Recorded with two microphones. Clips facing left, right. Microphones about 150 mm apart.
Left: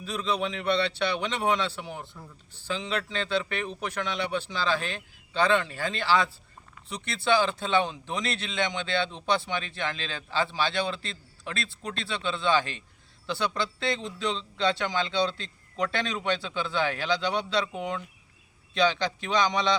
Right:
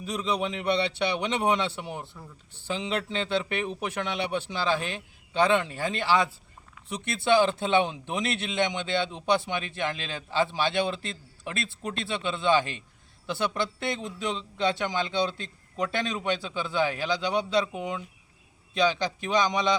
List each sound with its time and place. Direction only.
0.0 s a man's voice: 20° right (ahead or behind)
17.7 s speech: 5° right (ahead or behind)
18.8 s a man's voice: 15° right (ahead or behind)